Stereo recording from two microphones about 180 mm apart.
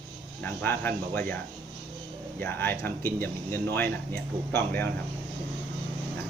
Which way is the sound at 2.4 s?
10° left (ahead or behind).